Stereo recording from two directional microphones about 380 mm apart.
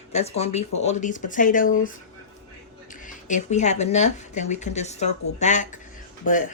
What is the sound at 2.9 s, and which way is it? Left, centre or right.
Speech, centre.